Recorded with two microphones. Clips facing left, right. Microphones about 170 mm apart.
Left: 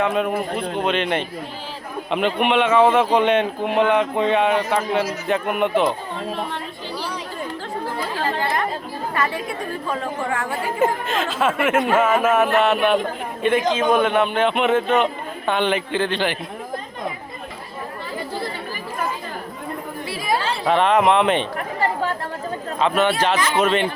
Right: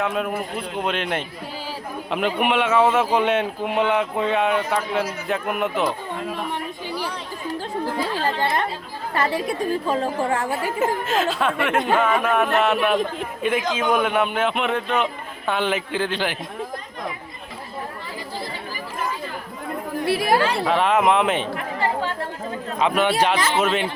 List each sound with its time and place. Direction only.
0.0 s a man's voice: centre (ahead or behind)
9.1 s chatter: 30° right (ahead or behind)
9.9 s a woman's voice: 30° right (ahead or behind)
10.5 s a man's voice: centre (ahead or behind)
20.1 s speech: 65° right (ahead or behind)
20.7 s a man's voice: 5° right (ahead or behind)
22.8 s speech: 15° right (ahead or behind)